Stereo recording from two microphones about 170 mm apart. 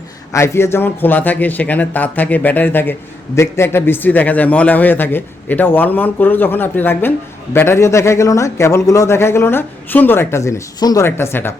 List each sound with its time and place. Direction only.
0.3 s a man's voice: 15° left (ahead or behind)